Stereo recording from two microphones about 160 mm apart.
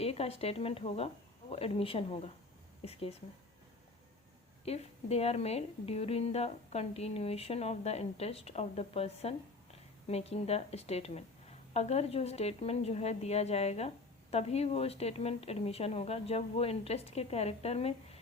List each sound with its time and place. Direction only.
0.0 s a woman's voice: 40° left (ahead or behind)
4.6 s a woman's voice: 40° left (ahead or behind)